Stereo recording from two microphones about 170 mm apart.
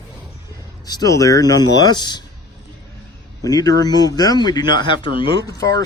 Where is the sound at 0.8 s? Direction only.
20° left (ahead or behind).